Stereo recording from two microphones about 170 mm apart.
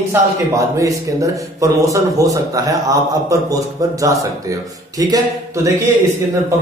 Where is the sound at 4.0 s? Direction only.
20° right (ahead or behind).